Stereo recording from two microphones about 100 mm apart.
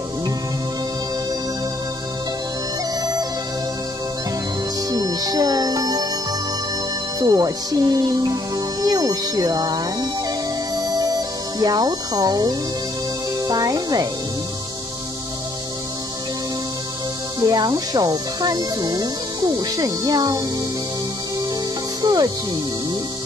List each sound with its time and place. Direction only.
3.0 s music: 40° right (ahead or behind)
4.9 s music: 40° right (ahead or behind)
7.2 s speech: 40° right (ahead or behind)
10.8 s music: 40° right (ahead or behind)
13.4 s speech: 40° right (ahead or behind)
17.4 s speech: 40° right (ahead or behind)
22.0 s music: 45° right (ahead or behind)